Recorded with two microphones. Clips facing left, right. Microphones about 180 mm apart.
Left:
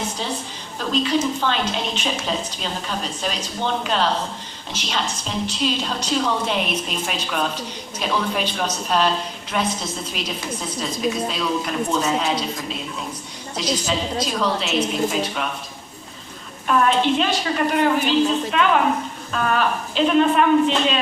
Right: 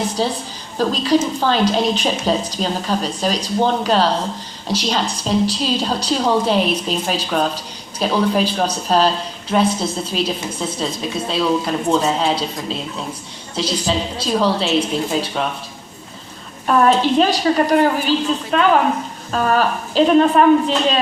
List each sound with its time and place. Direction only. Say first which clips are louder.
0.2 s a woman's voice: right 7 dB; 35° right (ahead or behind)
16.6 s a woman's voice: right 4 dB; 40° right (ahead or behind)